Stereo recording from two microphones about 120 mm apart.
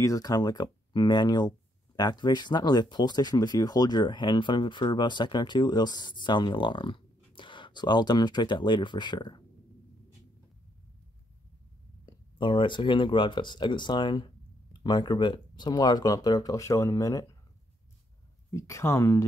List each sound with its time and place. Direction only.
0.0 s speech: 30° left (ahead or behind)
12.1 s speech: 40° left (ahead or behind)
18.5 s speech: 25° left (ahead or behind)